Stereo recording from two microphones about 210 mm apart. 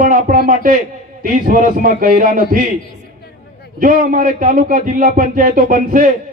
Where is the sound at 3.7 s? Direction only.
40° right (ahead or behind).